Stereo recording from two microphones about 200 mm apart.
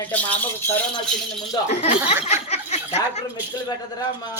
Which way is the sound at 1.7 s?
30° left (ahead or behind).